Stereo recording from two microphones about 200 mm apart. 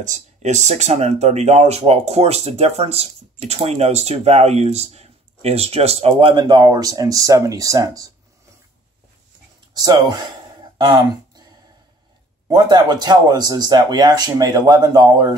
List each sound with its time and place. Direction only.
0.0 s speech: 35° right (ahead or behind); by 8.1 s 15° right (ahead or behind)
9.8 s a man's voice: 20° right (ahead or behind)
10.8 s a sound: 20° right (ahead or behind)
12.4 s a man's voice: 20° right (ahead or behind)